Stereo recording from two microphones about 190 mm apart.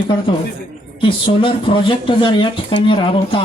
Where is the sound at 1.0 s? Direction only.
25° left (ahead or behind).